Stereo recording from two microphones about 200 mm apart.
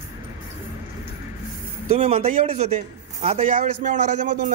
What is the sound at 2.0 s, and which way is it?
A man's voice, 30° right (ahead or behind).